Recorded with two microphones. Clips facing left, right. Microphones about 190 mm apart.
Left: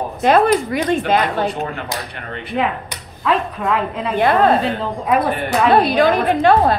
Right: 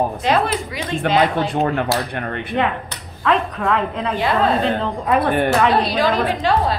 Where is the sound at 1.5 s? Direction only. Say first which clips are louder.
Right 6 dB; 55° right (ahead or behind).